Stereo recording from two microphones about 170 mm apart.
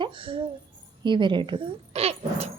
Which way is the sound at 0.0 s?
30° right (ahead or behind).